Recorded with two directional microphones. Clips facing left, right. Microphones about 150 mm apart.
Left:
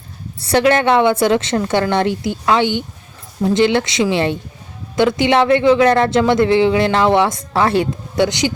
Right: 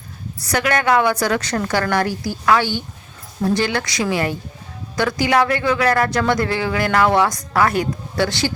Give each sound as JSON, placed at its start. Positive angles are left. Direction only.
{"t": 0.4, "sound": "speech", "side_deg": 25}